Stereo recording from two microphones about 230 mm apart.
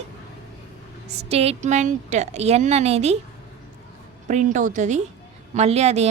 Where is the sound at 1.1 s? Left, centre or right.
Right.